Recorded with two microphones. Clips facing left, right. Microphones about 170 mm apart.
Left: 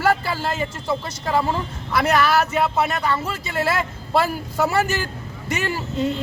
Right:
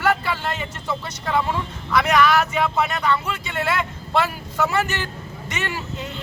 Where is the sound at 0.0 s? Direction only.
35° left (ahead or behind).